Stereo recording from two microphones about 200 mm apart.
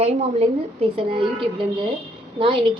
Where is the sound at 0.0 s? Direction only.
30° right (ahead or behind).